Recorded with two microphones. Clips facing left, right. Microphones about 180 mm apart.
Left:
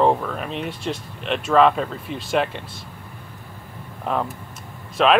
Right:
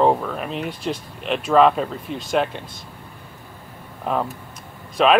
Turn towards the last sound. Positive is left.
turn(degrees=0)  # may be behind; listen again after turning